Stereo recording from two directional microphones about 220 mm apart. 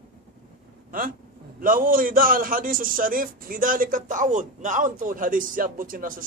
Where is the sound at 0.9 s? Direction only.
40° right (ahead or behind).